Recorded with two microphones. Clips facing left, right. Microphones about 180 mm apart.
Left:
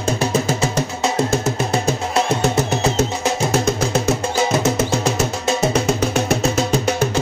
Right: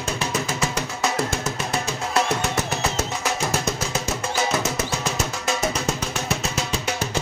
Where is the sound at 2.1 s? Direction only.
25° left (ahead or behind).